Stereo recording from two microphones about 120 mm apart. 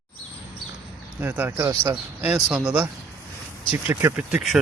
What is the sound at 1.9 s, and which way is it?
Speech, 10° right (ahead or behind).